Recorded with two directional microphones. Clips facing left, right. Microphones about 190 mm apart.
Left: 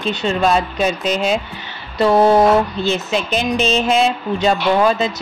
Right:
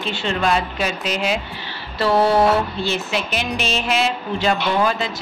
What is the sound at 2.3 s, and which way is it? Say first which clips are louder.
Speech: left 4 dB; 20° left (ahead or behind).